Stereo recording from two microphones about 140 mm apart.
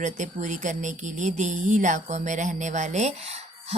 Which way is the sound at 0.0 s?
60° right (ahead or behind).